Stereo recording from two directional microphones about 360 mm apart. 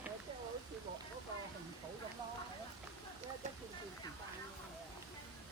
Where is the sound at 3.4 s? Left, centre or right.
Centre.